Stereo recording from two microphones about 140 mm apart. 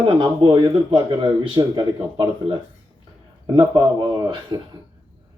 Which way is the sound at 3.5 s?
30° right (ahead or behind).